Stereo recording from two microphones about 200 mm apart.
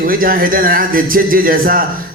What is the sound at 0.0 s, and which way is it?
A man's voice, 45° right (ahead or behind).